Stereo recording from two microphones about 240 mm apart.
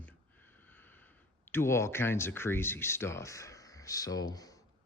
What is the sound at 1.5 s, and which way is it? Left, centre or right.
Speech, centre.